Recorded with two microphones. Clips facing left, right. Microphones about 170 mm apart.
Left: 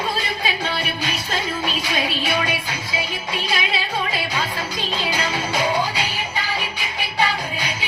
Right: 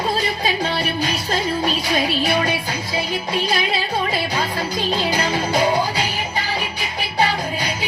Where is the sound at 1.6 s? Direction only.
40° right (ahead or behind).